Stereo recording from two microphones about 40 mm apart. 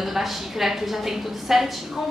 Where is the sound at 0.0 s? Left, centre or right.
Centre.